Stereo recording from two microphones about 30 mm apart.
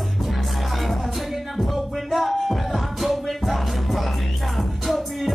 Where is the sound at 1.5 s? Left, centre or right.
Centre.